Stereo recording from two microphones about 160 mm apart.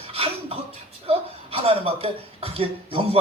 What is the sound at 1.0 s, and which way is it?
Speech, 35° right (ahead or behind).